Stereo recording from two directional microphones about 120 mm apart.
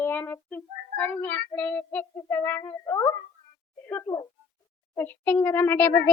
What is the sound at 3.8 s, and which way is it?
Speech, 15° left (ahead or behind).